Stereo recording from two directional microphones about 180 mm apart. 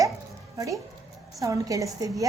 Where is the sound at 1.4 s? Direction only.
20° right (ahead or behind).